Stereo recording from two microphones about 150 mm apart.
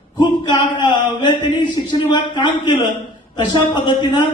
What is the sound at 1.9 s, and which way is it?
A man's voice, 30° left (ahead or behind).